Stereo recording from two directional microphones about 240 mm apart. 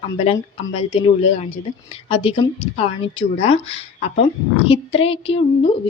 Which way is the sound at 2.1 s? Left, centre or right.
Left.